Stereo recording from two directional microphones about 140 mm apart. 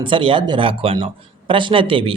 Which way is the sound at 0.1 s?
35° right (ahead or behind).